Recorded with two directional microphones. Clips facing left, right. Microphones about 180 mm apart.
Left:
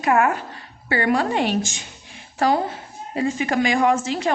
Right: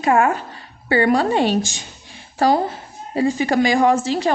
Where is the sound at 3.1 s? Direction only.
35° right (ahead or behind).